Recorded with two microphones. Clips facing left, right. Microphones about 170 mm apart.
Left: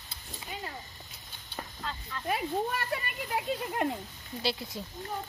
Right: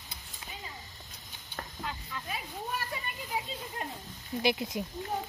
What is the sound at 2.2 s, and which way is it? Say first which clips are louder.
Speech: left 11 dB; 65° left (ahead or behind).